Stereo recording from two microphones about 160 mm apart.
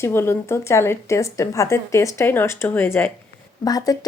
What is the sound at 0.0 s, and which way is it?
Speech, 15° left (ahead or behind).